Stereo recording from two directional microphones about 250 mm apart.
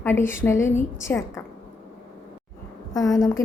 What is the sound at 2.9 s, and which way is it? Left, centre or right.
Speech, centre.